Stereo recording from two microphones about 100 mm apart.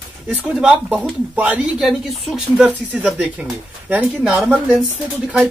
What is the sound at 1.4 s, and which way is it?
Speech, 15° right (ahead or behind).